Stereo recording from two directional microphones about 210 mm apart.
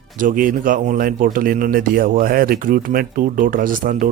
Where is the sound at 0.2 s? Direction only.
40° right (ahead or behind).